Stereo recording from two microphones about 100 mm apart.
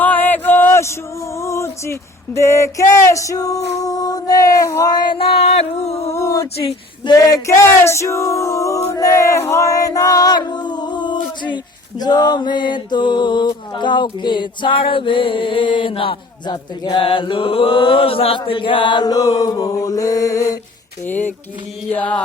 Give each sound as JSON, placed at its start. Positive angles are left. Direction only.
{"t": 0.0, "sound": "a sound", "side_deg": 20}
{"t": 5.1, "sound": "a sound", "side_deg": 65}
{"t": 6.1, "sound": "a sound", "side_deg": 30}
{"t": 6.6, "sound": "speech", "side_deg": 70}
{"t": 7.1, "sound": "male singing", "side_deg": 35}
{"t": 14.8, "sound": "mantra", "side_deg": 60}
{"t": 16.5, "sound": "male singing", "side_deg": 40}
{"t": 17.0, "sound": "mantra", "side_deg": 60}
{"t": 21.1, "sound": "chant", "side_deg": 15}